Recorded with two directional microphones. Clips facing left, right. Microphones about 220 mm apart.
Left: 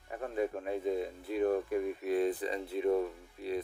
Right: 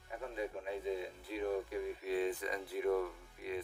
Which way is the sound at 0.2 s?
55° left (ahead or behind).